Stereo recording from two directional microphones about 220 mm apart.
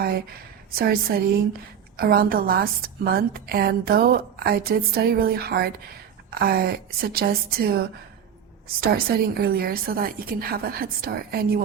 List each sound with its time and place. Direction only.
0.8 s a woman's voice: 45° right (ahead or behind)